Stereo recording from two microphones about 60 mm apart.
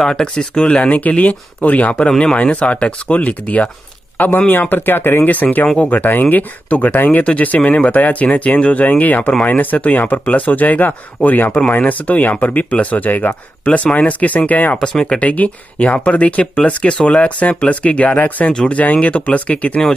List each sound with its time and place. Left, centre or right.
0.0 s speech: centre
15.2 s speech: left